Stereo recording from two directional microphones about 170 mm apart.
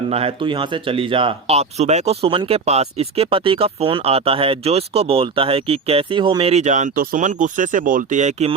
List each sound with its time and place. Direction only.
0.1 s speech: 35° right (ahead or behind)